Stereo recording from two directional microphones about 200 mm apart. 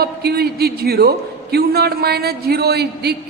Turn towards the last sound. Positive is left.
turn(degrees=-55)  # may be behind; listen again after turning